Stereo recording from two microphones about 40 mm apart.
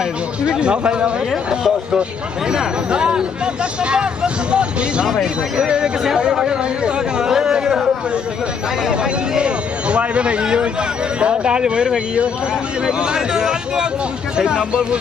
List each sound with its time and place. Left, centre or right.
0.0 s speech: right
1.5 s speech: centre
5.0 s speech: centre
5.5 s speech: right
8.9 s speech: right